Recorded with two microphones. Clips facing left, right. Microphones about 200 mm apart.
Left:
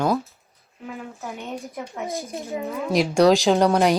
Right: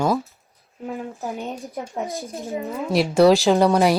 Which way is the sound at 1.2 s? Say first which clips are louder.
Right 5 dB; 35° right (ahead or behind).